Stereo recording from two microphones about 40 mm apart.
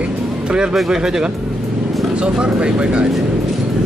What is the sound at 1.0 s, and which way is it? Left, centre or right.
Speech, centre.